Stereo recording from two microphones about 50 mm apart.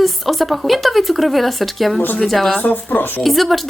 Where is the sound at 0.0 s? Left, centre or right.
Centre.